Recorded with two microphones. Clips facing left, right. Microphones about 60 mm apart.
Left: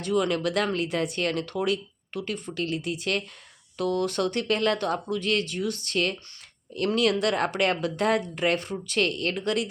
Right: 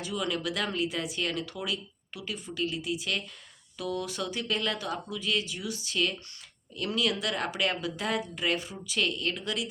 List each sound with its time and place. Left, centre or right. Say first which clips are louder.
0.0 s speech: left 7 dB; left